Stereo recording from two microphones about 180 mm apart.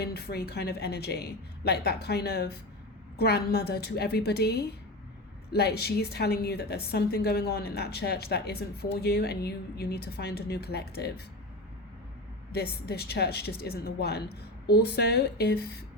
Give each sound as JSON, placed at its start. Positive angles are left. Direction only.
{"t": 0.0, "sound": "a woman's voice", "side_deg": 60}
{"t": 12.5, "sound": "a woman's voice", "side_deg": 65}